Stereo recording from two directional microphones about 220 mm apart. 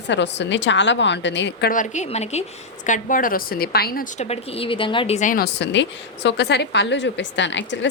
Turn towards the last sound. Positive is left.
turn(degrees=55)  # may be behind; listen again after turning